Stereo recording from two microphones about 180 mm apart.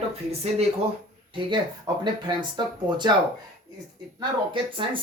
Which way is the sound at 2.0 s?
25° right (ahead or behind).